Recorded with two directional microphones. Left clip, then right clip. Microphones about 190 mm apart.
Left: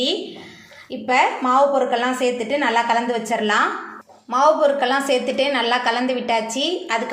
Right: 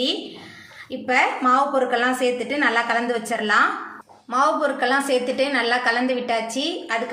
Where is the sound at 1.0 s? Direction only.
10° left (ahead or behind).